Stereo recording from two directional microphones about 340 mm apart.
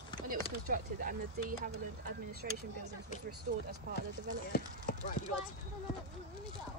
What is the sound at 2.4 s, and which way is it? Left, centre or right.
Speech, right.